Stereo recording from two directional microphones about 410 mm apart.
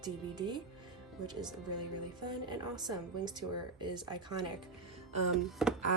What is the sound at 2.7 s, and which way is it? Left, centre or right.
Speech, centre.